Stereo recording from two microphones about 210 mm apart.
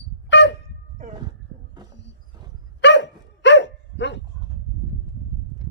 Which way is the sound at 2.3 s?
20° right (ahead or behind).